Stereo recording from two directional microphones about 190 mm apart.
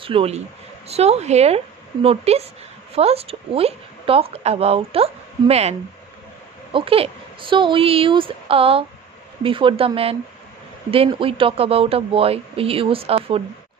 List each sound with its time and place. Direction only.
0.0 s a woman's voice: 30° right (ahead or behind)